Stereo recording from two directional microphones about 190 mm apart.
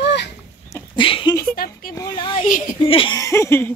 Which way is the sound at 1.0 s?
25° left (ahead or behind).